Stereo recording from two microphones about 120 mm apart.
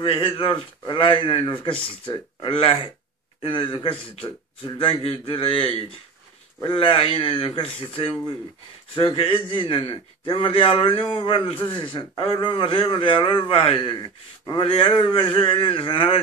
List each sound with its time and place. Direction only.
0.0 s a man's voice: 50° left (ahead or behind)